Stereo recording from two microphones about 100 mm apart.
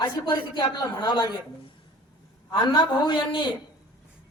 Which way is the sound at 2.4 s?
45° left (ahead or behind).